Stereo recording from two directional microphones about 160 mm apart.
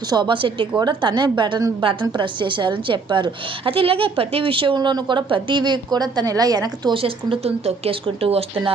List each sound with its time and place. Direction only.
0.1 s a woman's voice: 30° right (ahead or behind)